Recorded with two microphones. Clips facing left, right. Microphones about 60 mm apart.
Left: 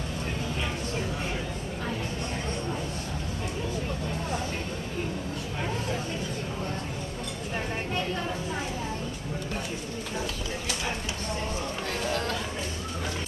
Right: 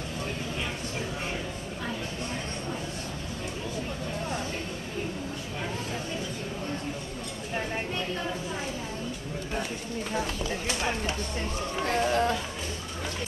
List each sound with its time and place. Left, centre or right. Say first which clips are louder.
11.8 s chatter: right 7 dB; right